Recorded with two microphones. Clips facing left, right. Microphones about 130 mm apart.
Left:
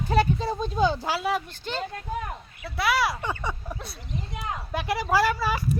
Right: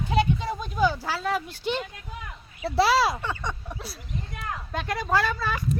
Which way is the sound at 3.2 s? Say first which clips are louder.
Left 1 dB; 10° left (ahead or behind).